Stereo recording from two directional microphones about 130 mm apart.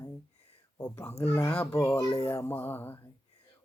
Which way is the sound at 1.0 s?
15° left (ahead or behind).